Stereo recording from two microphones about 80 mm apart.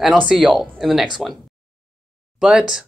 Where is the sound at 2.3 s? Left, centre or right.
Centre.